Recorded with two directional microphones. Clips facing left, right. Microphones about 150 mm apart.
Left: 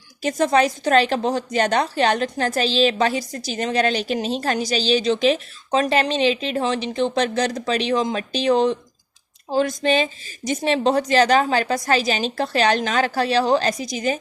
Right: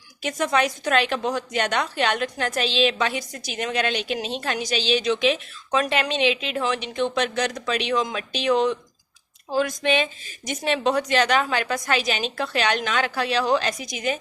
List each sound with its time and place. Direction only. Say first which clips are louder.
0.2 s a woman's voice: left 5 dB; 35° left (ahead or behind)